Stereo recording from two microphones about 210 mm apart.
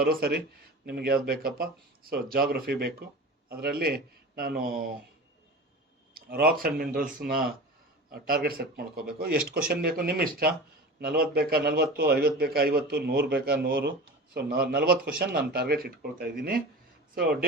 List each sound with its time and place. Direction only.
0.0 s speech: 45° right (ahead or behind)
6.1 s speech: 45° right (ahead or behind)